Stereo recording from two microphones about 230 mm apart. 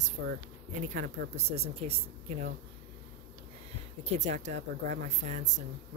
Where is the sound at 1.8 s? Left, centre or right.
Right.